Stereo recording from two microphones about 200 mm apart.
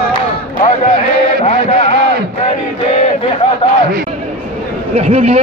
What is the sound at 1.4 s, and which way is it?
Music, 35° left (ahead or behind).